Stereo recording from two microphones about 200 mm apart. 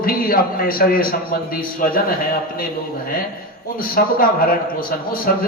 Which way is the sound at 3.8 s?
45° left (ahead or behind).